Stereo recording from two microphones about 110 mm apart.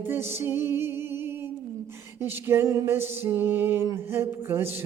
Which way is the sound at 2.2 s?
20° right (ahead or behind).